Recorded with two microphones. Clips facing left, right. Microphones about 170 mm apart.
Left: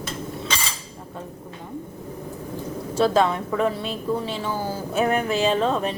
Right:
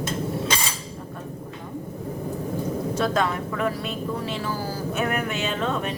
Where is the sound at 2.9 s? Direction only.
30° left (ahead or behind).